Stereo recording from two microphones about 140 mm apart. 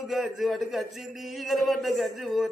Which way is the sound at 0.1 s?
Centre (ahead or behind).